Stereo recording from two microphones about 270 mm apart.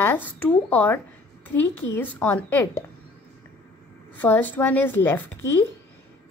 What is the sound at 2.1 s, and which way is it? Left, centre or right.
Speech, centre.